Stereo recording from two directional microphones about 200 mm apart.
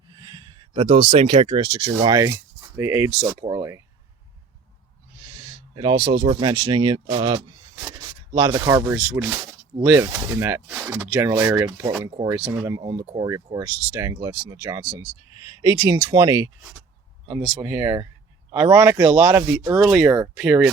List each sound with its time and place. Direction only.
0.1 s speech: 20° right (ahead or behind)
5.7 s speech: 25° right (ahead or behind)
9.0 s speech: 5° right (ahead or behind)
17.6 s speech: 10° right (ahead or behind)
19.8 s speech: centre (ahead or behind)